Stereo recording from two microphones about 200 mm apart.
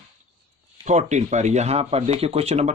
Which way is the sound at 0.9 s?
35° right (ahead or behind).